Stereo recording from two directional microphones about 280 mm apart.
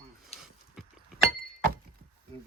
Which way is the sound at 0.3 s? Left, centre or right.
Left.